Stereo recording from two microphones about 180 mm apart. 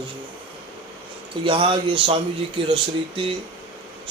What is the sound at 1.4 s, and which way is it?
Speech, 30° right (ahead or behind).